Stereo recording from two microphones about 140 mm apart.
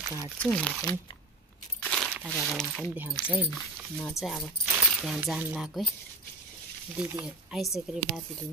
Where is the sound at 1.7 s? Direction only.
5° left (ahead or behind).